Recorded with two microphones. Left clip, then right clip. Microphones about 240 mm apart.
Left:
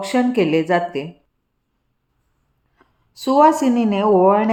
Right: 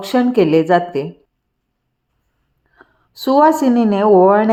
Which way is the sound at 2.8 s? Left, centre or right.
Centre.